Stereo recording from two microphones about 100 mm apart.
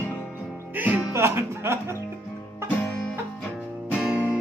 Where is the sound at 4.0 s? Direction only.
15° right (ahead or behind).